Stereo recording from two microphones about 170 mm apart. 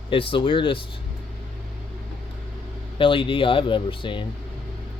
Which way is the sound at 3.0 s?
30° left (ahead or behind).